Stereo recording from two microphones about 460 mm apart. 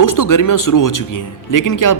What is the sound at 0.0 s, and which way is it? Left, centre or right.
A man's voice, left.